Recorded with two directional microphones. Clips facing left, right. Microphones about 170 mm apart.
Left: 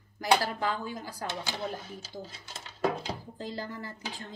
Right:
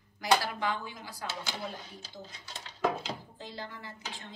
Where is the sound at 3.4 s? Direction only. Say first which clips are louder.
Left 9 dB; 45° left (ahead or behind).